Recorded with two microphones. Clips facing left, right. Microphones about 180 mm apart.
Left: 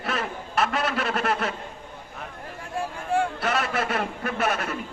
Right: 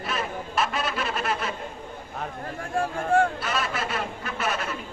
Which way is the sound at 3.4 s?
60° left (ahead or behind).